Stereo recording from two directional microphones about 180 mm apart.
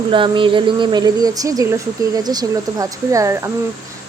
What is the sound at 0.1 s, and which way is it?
Speech, 30° right (ahead or behind).